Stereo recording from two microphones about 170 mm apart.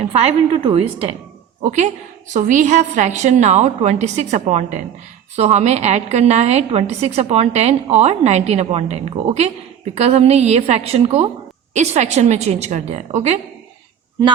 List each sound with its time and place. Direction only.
0.0 s a woman's voice: 40° right (ahead or behind)